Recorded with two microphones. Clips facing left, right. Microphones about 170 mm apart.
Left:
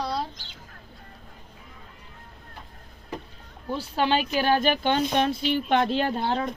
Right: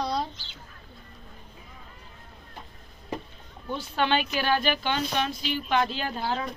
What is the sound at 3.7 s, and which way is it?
Speech, 35° left (ahead or behind).